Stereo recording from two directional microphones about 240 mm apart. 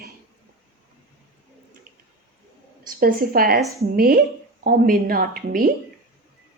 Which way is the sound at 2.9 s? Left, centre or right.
Right.